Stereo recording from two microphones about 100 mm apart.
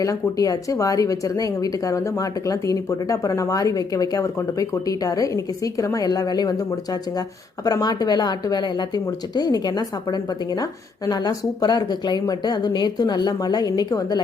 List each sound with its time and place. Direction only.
0.0 s a woman's voice: 35° left (ahead or behind)